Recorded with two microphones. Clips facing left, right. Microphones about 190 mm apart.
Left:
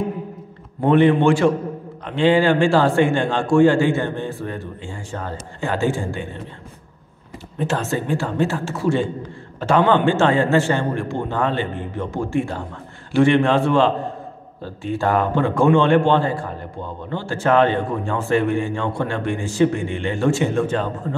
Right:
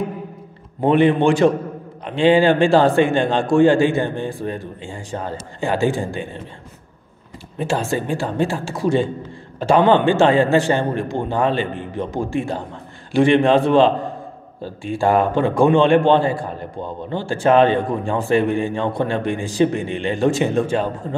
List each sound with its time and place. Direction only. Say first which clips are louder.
0.7 s a man's voice: even; 15° right (ahead or behind)
7.5 s a man's voice: right 1 dB; 10° right (ahead or behind)